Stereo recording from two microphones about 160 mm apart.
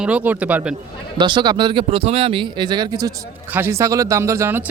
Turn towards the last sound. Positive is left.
turn(degrees=-15)  # may be behind; listen again after turning